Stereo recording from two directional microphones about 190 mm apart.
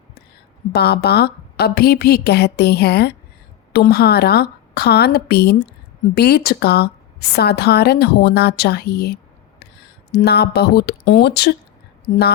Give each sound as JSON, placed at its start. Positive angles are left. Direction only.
{"t": 0.7, "sound": "a woman's voice", "side_deg": 60}